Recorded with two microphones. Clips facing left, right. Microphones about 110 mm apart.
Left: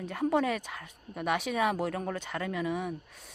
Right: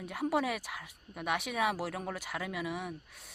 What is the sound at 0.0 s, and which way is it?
Speech, 5° right (ahead or behind).